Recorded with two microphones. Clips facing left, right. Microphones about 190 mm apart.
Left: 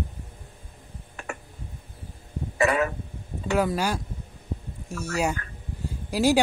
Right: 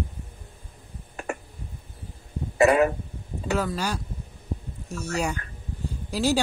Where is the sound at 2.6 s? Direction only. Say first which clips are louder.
Right 5 dB; 40° right (ahead or behind).